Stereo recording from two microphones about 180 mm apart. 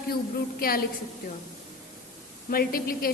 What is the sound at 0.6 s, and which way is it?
Speech, 55° left (ahead or behind).